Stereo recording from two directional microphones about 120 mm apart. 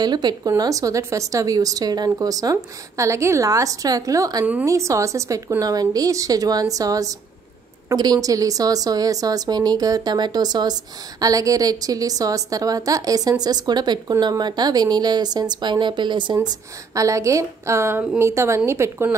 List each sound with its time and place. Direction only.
0.0 s a woman's voice: 35° right (ahead or behind)
16.4 s a woman's voice: 25° right (ahead or behind)